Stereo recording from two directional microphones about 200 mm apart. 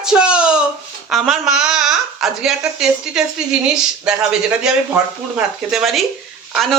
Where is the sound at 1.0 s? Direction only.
Centre (ahead or behind).